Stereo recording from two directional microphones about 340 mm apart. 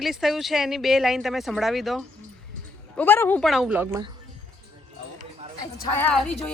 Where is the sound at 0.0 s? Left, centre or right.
Centre.